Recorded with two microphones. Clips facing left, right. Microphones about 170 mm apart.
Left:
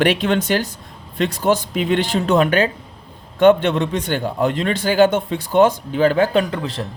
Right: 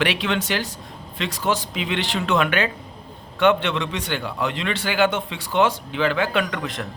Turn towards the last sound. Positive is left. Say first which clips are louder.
# left 4 dB
turn(degrees=30)  # may be behind; listen again after turning